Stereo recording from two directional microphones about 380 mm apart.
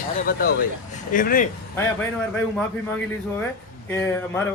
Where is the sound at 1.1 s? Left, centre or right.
Left.